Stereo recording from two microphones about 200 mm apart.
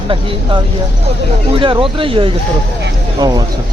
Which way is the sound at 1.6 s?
25° right (ahead or behind).